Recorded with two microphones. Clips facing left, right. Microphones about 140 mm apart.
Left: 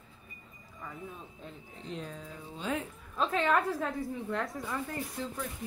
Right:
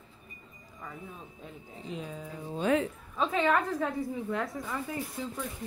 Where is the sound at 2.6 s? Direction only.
70° right (ahead or behind).